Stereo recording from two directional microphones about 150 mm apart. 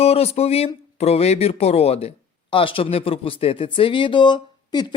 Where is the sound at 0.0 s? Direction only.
40° left (ahead or behind).